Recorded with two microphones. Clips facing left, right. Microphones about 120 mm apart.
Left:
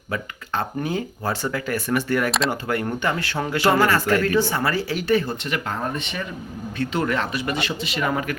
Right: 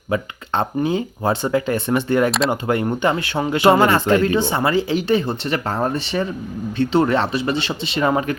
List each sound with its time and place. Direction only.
0.1 s speech: 25° right (ahead or behind)